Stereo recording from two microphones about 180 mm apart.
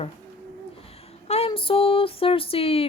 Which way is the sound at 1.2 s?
35° left (ahead or behind).